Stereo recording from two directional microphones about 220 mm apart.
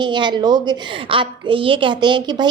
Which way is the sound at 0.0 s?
20° right (ahead or behind).